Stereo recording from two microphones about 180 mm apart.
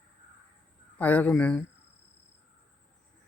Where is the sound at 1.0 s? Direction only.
10° left (ahead or behind).